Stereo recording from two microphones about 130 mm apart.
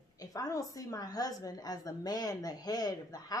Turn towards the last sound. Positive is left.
turn(degrees=30)  # may be behind; listen again after turning